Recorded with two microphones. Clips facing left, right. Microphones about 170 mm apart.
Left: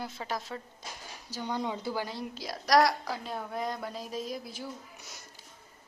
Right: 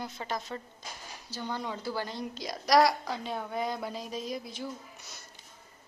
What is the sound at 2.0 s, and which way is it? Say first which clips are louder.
A woman's voice: right 1 dB; 5° left (ahead or behind).